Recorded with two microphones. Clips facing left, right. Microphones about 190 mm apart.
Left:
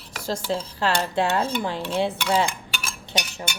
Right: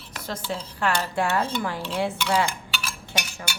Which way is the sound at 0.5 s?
25° left (ahead or behind).